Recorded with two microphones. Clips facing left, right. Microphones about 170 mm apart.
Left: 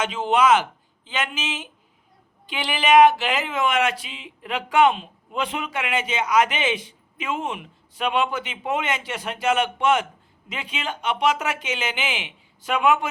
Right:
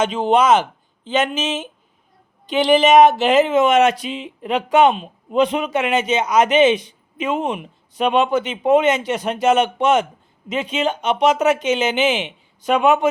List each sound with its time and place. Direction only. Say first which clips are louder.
0.0 s speech: right 4 dB; 20° right (ahead or behind)